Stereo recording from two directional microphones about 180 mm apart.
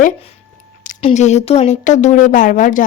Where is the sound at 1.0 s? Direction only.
35° left (ahead or behind).